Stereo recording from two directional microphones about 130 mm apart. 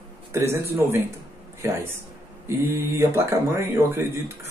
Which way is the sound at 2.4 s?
20° right (ahead or behind).